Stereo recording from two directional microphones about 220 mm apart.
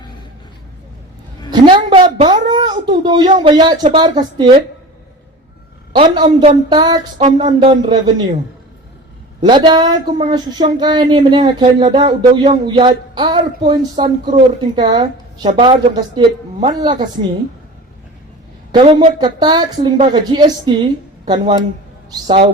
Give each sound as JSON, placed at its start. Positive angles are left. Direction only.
{"t": 1.5, "sound": "a sound", "side_deg": -20}
{"t": 3.3, "sound": "speech", "side_deg": -20}
{"t": 5.9, "sound": "speech", "side_deg": -20}
{"t": 9.4, "sound": "speech", "side_deg": -20}
{"t": 18.7, "sound": "speech", "side_deg": -20}